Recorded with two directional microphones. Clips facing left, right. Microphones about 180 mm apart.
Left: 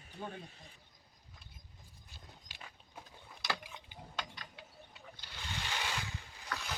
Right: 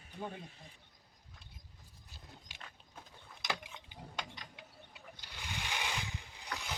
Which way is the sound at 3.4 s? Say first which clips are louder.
Even; 20° right (ahead or behind).